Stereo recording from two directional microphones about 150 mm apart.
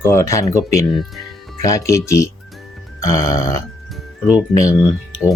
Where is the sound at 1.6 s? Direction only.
20° left (ahead or behind).